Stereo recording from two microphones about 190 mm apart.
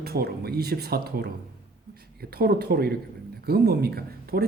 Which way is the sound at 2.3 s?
55° right (ahead or behind).